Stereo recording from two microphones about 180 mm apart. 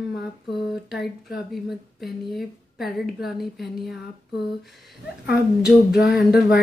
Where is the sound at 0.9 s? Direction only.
Centre (ahead or behind).